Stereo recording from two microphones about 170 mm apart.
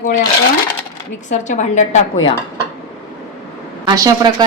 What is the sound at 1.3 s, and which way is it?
Speech, 45° left (ahead or behind).